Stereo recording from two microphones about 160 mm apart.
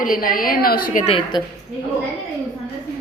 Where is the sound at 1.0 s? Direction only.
30° left (ahead or behind).